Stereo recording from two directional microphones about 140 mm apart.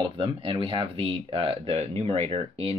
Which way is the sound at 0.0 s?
40° right (ahead or behind).